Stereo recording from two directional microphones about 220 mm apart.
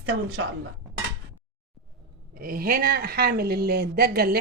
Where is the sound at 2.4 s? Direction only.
40° right (ahead or behind).